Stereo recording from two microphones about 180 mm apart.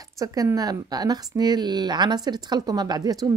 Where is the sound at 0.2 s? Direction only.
20° right (ahead or behind).